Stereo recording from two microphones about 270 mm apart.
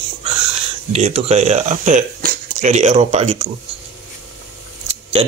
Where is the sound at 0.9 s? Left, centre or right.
Right.